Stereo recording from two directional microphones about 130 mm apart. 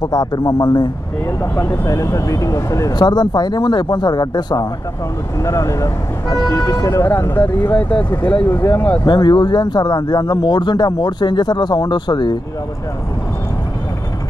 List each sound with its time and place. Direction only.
0.0 s speech: 30° left (ahead or behind)
1.4 s speech: 20° left (ahead or behind)
9.0 s speech: 35° left (ahead or behind)